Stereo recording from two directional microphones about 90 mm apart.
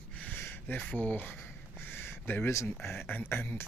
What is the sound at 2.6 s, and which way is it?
Speech, 25° left (ahead or behind).